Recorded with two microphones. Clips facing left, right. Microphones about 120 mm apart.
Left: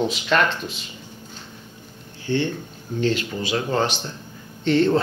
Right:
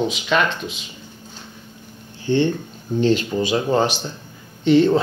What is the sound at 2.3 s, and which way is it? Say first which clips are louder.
Speech: right 5 dB; 25° right (ahead or behind).